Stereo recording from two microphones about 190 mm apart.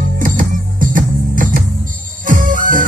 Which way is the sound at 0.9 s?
45° right (ahead or behind).